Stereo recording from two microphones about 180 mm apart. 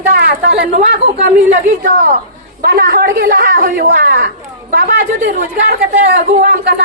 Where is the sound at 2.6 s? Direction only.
60° right (ahead or behind).